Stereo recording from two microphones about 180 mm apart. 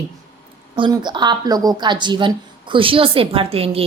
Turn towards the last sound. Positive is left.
turn(degrees=-30)  # may be behind; listen again after turning